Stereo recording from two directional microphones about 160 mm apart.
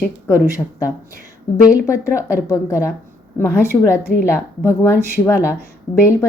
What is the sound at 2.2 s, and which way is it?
Speech, 20° left (ahead or behind).